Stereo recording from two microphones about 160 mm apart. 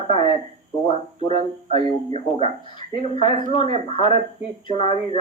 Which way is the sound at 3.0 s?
35° left (ahead or behind).